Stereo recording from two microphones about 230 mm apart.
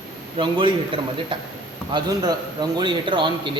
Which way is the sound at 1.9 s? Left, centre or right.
Centre.